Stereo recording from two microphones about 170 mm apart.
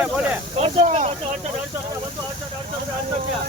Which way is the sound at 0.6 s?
40° right (ahead or behind).